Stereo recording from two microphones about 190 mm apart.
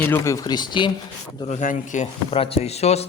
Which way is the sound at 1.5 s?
40° left (ahead or behind).